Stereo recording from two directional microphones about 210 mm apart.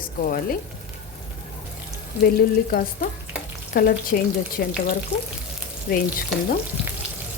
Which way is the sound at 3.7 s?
45° left (ahead or behind).